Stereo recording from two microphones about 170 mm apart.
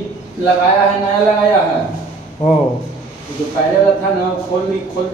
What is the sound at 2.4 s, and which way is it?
Speech, 40° left (ahead or behind).